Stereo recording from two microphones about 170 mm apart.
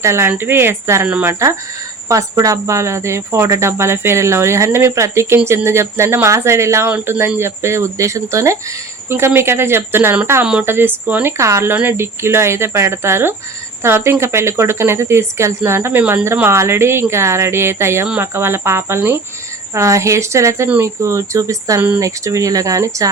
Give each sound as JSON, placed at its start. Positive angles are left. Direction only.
{"t": 0.0, "sound": "speech", "side_deg": -15}